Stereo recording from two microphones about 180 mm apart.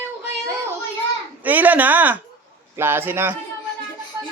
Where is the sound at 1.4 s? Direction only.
10° right (ahead or behind).